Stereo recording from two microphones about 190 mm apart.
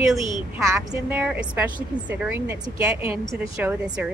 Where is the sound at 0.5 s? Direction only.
15° right (ahead or behind).